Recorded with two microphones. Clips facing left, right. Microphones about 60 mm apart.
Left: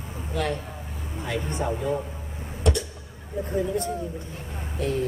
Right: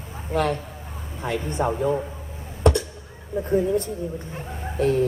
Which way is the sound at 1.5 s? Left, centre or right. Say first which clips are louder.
Right 5 dB; right.